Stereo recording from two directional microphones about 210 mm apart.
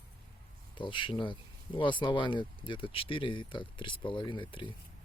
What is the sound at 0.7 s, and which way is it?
Speech, 25° left (ahead or behind).